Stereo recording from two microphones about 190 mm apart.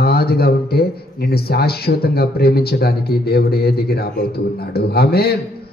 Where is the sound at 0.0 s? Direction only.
55° left (ahead or behind).